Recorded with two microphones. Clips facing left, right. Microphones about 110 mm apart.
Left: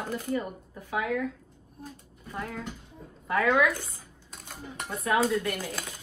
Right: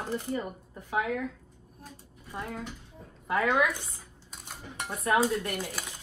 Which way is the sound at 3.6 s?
20° right (ahead or behind).